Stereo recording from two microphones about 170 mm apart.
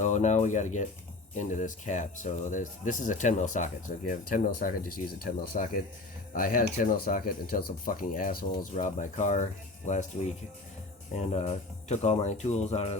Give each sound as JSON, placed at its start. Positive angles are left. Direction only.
{"t": 0.0, "sound": "speech", "side_deg": 45}
{"t": 8.7, "sound": "speech", "side_deg": 45}